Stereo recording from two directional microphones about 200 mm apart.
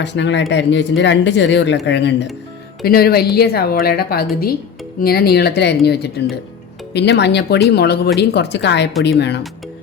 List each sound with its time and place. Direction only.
0.0 s speech: 60° left (ahead or behind)
2.8 s speech: 50° left (ahead or behind)